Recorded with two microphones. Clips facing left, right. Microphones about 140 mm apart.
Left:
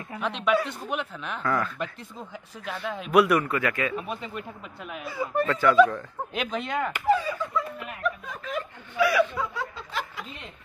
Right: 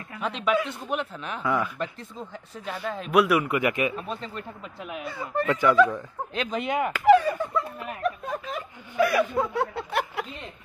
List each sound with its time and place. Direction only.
0.2 s speech: centre (ahead or behind)
1.8 s speech: 5° left (ahead or behind)
3.4 s speech: 20° right (ahead or behind)
3.9 s speech: 10° left (ahead or behind)
4.7 s speech: centre (ahead or behind)
5.5 s speech: 15° right (ahead or behind)
7.1 s speech: 60° right (ahead or behind)
8.0 s snicker: 40° right (ahead or behind); by 10.2 s 65° right (ahead or behind)